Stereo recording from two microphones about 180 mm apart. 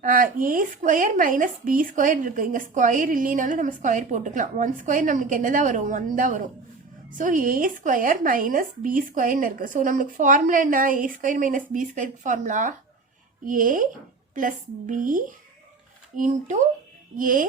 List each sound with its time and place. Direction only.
0.0 s speech: 50° right (ahead or behind)